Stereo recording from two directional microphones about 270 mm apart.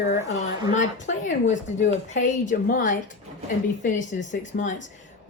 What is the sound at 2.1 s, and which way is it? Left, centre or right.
A woman's voice, left.